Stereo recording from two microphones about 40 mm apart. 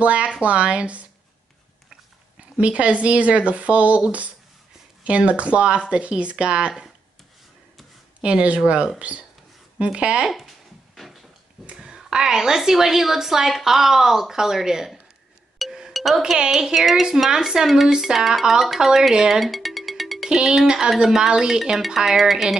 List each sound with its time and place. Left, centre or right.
0.0 s speech: right
2.5 s speech: right
8.2 s speech: right
9.9 s speech: right
10.2 s speech: centre
11.7 s a woman's voice: centre
15.9 s chink: centre
16.2 s a woman's voice: centre
17.6 s a woman's voice: centre
19.4 s music: centre
20.2 s a woman's voice: centre
20.9 s a woman's voice: centre